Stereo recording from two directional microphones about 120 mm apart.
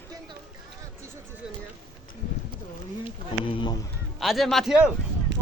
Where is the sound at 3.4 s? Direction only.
40° left (ahead or behind).